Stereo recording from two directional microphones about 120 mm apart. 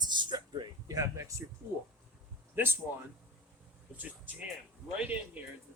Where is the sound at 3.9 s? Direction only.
15° right (ahead or behind).